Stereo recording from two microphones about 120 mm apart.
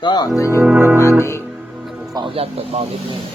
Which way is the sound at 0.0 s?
35° left (ahead or behind).